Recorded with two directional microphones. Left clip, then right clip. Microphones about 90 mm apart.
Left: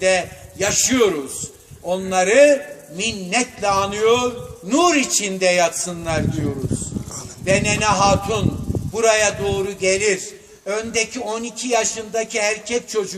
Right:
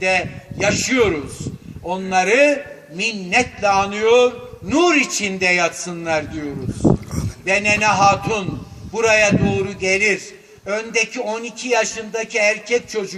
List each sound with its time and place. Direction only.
0.6 s a man's voice: 35° left (ahead or behind)
7.4 s a man's voice: 35° left (ahead or behind)